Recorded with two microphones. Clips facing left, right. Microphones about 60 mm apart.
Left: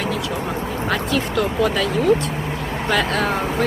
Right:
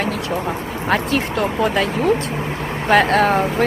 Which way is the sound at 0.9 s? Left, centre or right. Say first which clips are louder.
Right 4 dB; right.